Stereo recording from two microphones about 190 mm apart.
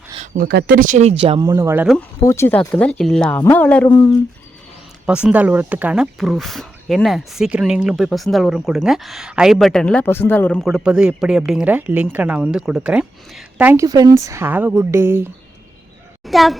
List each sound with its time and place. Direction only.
0.3 s speech: 50° right (ahead or behind); by 1.4 s 30° right (ahead or behind)
1.4 s a woman's voice: 15° right (ahead or behind)
2.2 s speech: 15° left (ahead or behind)
5.0 s a woman's voice: 5° right (ahead or behind)
13.8 s a woman's voice: 20° right (ahead or behind)
16.2 s speech: centre (ahead or behind)